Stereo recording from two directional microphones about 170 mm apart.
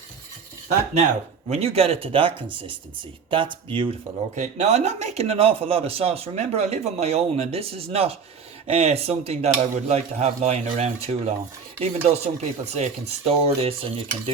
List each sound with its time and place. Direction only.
1.5 s a man's voice: 35° right (ahead or behind)
4.4 s a man's voice: 40° right (ahead or behind)